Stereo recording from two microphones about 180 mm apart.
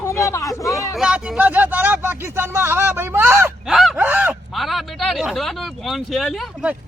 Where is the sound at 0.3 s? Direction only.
15° left (ahead or behind).